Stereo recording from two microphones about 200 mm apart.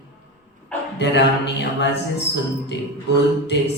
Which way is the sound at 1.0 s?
60° left (ahead or behind).